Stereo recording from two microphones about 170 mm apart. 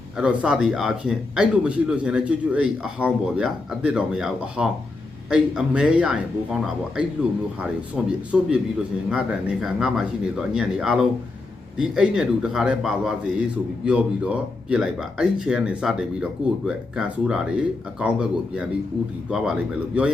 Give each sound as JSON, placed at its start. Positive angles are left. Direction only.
{"t": 0.2, "sound": "a man's voice", "side_deg": -5}